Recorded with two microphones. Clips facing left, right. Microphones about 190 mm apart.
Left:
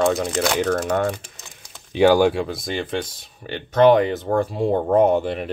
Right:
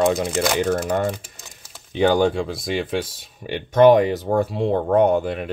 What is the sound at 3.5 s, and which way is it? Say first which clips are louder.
Speech: right 2 dB; 15° right (ahead or behind).